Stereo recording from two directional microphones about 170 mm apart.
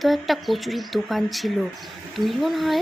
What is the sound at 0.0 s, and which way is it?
Speech, centre (ahead or behind).